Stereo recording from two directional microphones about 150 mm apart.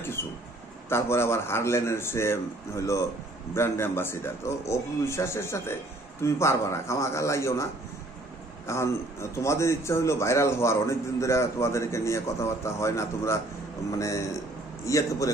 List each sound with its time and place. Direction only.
0.0 s a man's voice: 15° left (ahead or behind)